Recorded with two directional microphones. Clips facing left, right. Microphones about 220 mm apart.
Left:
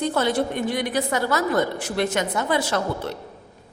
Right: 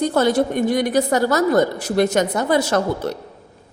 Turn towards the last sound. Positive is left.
turn(degrees=-45)  # may be behind; listen again after turning